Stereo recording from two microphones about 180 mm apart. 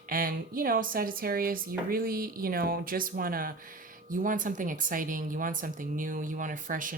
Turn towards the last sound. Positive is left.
turn(degrees=-50)  # may be behind; listen again after turning